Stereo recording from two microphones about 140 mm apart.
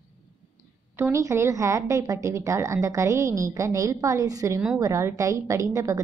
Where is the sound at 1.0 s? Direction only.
20° right (ahead or behind).